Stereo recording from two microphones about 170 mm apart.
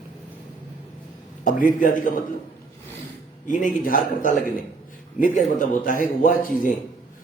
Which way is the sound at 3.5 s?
50° left (ahead or behind).